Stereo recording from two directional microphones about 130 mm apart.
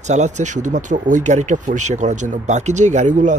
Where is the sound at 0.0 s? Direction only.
65° right (ahead or behind).